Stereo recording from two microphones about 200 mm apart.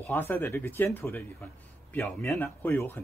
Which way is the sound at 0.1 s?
10° left (ahead or behind).